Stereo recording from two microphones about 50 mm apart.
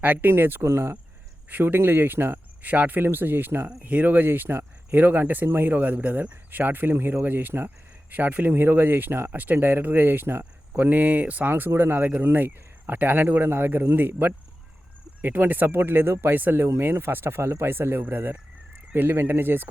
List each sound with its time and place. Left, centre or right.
0.0 s speech: right
0.6 s speech: right
1.5 s speech: right
2.6 s speech: right
3.8 s speech: right
11.7 s speech: right